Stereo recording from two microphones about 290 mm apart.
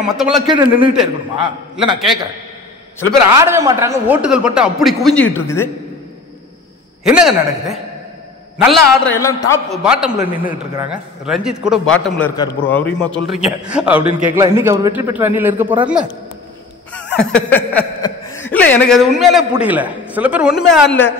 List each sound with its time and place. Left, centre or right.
0.0 s speech: centre
0.5 s a man's voice: centre
3.3 s speech: centre
7.1 s speech: centre
9.1 s a man's voice: centre
9.8 s speech: centre
10.4 s a man's voice: centre
10.9 s a man's voice: centre
17.1 s speech: centre